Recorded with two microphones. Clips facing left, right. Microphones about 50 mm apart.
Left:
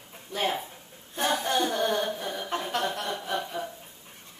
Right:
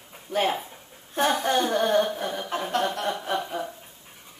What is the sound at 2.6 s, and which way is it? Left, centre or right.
Speech, centre.